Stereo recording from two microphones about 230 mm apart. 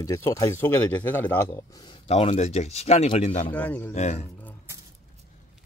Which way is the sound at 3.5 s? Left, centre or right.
Centre.